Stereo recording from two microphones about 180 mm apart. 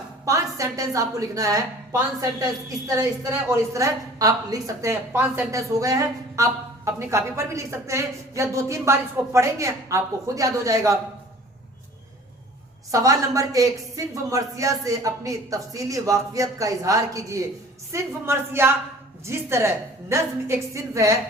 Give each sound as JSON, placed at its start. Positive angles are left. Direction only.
{"t": 0.3, "sound": "a woman's voice", "side_deg": -15}
{"t": 12.9, "sound": "a woman's voice", "side_deg": -20}